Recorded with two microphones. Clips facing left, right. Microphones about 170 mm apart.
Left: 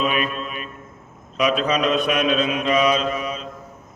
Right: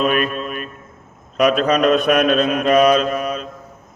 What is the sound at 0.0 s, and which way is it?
Mantra, 50° right (ahead or behind).